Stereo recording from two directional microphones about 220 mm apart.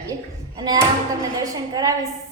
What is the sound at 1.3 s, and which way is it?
Speech, 15° right (ahead or behind).